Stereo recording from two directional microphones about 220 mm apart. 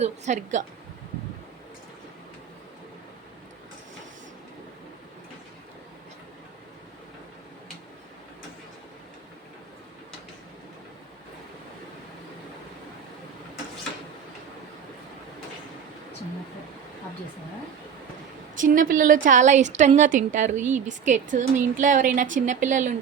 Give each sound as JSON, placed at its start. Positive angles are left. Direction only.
{"t": 0.0, "sound": "a woman's voice", "side_deg": -35}
{"t": 18.5, "sound": "a woman's voice", "side_deg": -35}